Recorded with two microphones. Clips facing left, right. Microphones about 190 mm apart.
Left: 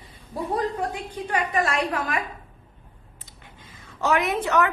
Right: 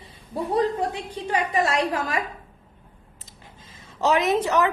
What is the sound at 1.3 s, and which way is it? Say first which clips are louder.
Speech: right 2 dB; 25° right (ahead or behind).